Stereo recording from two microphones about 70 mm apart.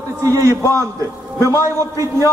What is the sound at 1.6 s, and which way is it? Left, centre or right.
Speech, right.